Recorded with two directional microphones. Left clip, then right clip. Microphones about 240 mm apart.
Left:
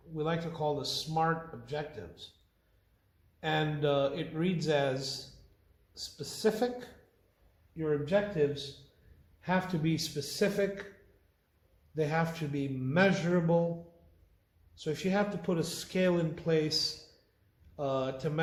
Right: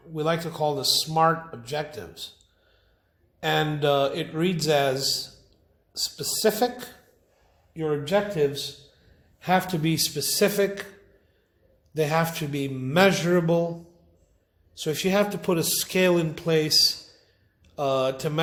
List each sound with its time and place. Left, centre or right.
0.1 s a man's voice: right
3.4 s a man's voice: right
11.9 s a man's voice: right
14.8 s a man's voice: right